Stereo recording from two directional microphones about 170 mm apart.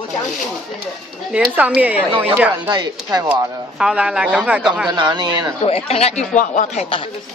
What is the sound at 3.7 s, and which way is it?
Speech, 5° right (ahead or behind).